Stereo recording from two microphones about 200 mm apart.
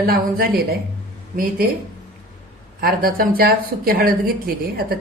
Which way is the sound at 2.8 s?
45° right (ahead or behind).